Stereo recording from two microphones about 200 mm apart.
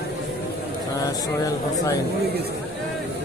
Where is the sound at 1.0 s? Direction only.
15° left (ahead or behind).